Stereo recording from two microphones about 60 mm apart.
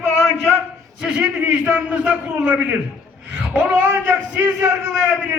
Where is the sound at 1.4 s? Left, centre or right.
Right.